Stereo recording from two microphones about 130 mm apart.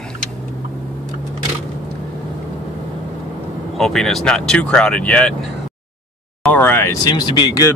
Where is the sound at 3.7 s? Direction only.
Centre (ahead or behind).